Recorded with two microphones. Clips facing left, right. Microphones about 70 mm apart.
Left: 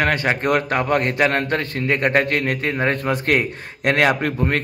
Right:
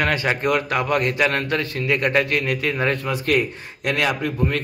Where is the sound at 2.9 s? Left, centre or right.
Left.